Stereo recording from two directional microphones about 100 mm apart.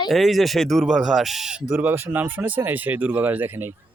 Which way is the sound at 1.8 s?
20° right (ahead or behind).